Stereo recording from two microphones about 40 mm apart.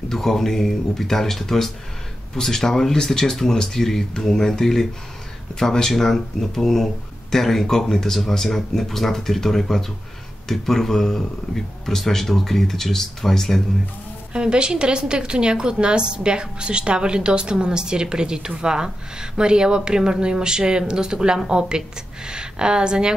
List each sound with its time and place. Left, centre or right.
0.1 s speech: centre
14.3 s a woman's voice: right